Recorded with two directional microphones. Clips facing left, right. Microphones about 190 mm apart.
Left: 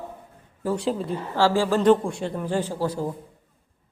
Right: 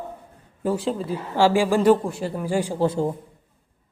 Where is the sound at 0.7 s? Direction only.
Centre (ahead or behind).